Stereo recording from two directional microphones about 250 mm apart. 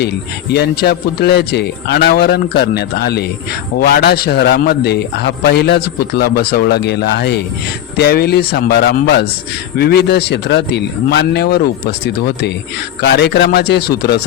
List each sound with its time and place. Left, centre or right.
0.5 s a man's voice: left